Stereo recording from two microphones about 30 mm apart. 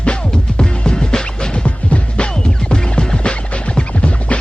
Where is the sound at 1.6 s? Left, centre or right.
Left.